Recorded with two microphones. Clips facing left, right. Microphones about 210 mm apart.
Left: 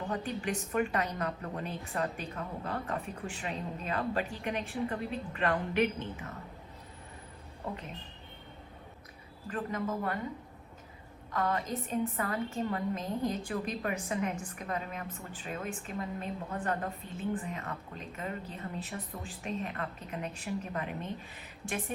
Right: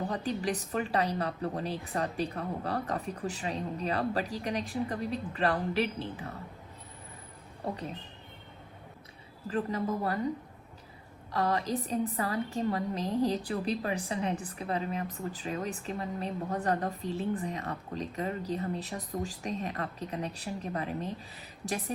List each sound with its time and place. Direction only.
0.1 s a woman's voice: 35° right (ahead or behind)
9.5 s a woman's voice: 35° right (ahead or behind)
11.3 s a woman's voice: 35° right (ahead or behind)